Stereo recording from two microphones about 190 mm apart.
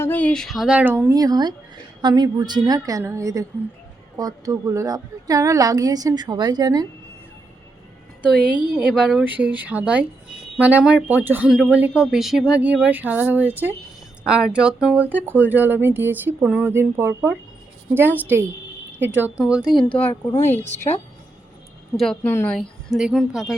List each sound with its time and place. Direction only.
0.0 s a woman's voice: 10° left (ahead or behind); by 6.8 s 20° right (ahead or behind)
8.7 s a woman's voice: centre (ahead or behind)
19.6 s speech: 25° left (ahead or behind)
20.4 s a woman's voice: 10° left (ahead or behind)
21.9 s a woman's voice: 5° left (ahead or behind)